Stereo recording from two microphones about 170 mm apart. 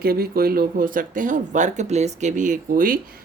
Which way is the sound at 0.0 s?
65° right (ahead or behind).